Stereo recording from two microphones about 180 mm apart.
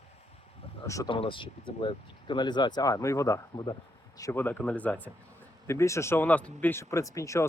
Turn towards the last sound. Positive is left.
turn(degrees=15)  # may be behind; listen again after turning